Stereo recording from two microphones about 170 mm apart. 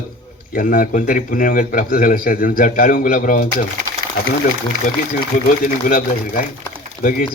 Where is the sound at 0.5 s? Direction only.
55° left (ahead or behind).